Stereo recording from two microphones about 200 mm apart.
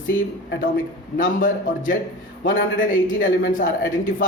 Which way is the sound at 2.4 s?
75° left (ahead or behind).